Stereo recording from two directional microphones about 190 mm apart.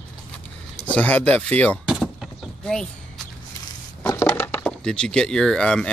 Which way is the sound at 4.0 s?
15° left (ahead or behind).